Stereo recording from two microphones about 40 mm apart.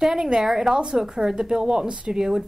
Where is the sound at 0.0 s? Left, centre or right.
Centre.